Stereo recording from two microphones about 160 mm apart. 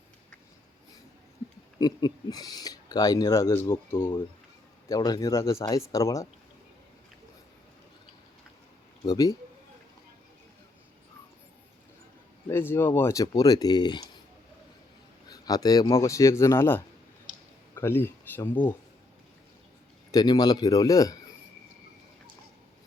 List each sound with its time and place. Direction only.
1.8 s speech: 25° left (ahead or behind)
9.0 s speech: 20° left (ahead or behind)
12.5 s speech: 15° left (ahead or behind)
15.3 s speech: 25° left (ahead or behind)
20.1 s speech: 25° left (ahead or behind)